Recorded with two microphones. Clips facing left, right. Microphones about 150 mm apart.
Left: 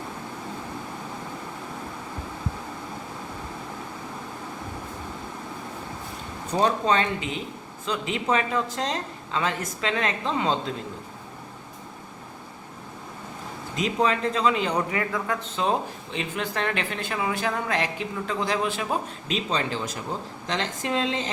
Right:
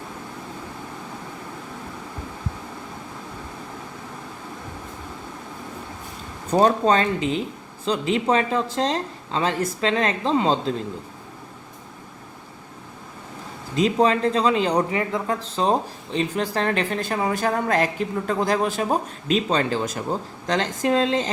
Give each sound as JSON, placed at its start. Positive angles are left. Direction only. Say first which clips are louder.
{"t": 6.5, "sound": "speech", "louder": "right 5 dB", "side_deg": -40}
{"t": 13.7, "sound": "a woman's voice", "louder": "right 5 dB", "side_deg": -35}